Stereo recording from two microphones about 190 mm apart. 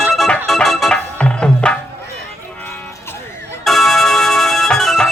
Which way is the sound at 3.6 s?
Centre (ahead or behind).